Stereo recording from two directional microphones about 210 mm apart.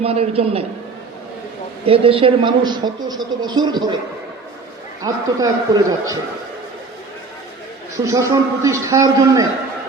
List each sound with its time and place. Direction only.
0.0 s a man's voice: 25° right (ahead or behind)
1.9 s a man's voice: 25° right (ahead or behind)
5.0 s a man's voice: 15° right (ahead or behind)
8.0 s a man's voice: 15° right (ahead or behind)